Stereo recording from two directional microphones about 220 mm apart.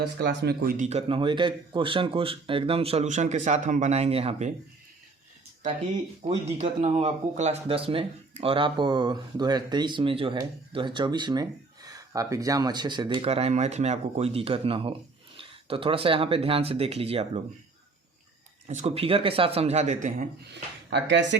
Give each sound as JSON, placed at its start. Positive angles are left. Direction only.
{"t": 0.0, "sound": "speech", "side_deg": -50}
{"t": 6.4, "sound": "speech", "side_deg": -30}
{"t": 18.7, "sound": "speech", "side_deg": -30}
{"t": 20.5, "sound": "speech", "side_deg": -55}